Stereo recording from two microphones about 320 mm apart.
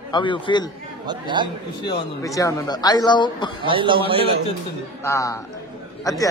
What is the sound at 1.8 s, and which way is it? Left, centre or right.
A man's voice, centre.